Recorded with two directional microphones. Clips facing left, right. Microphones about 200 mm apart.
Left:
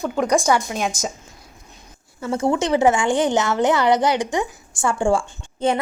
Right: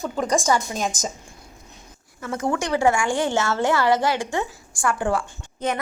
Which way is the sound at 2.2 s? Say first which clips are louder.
Left 5 dB; 25° left (ahead or behind).